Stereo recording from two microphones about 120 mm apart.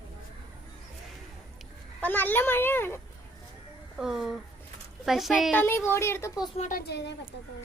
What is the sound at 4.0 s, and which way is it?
Speech, 5° right (ahead or behind).